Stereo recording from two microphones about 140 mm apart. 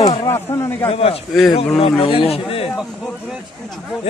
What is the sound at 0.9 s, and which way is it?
A man's voice, 45° left (ahead or behind).